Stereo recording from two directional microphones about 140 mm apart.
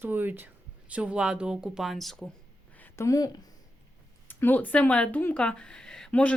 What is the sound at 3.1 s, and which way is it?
Speech, 25° left (ahead or behind).